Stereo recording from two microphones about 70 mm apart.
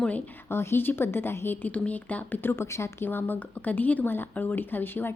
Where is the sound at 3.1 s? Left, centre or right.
Left.